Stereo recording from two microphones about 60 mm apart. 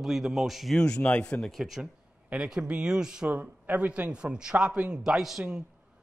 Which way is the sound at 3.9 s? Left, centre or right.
Centre.